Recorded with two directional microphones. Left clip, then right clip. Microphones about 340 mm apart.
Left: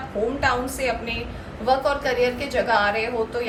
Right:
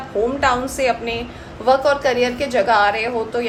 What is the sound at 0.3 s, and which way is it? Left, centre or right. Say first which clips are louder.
A woman's voice: right 4 dB; right.